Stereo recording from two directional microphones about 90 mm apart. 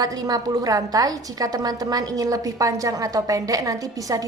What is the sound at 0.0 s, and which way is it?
A woman's voice, 45° right (ahead or behind).